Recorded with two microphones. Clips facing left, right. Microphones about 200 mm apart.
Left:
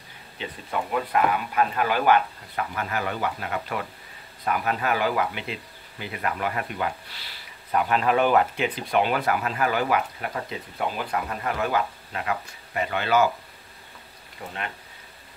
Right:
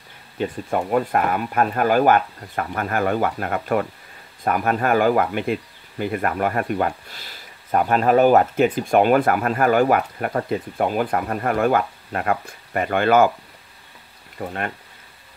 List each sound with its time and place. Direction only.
0.4 s speech: 45° right (ahead or behind)
14.4 s speech: 50° right (ahead or behind)